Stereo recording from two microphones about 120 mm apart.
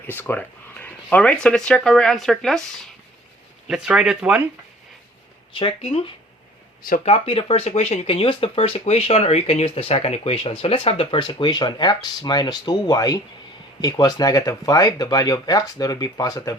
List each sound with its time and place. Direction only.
0.1 s speech: 15° left (ahead or behind)
3.7 s speech: 5° right (ahead or behind)
5.5 s speech: 50° left (ahead or behind); by 16.6 s 30° left (ahead or behind)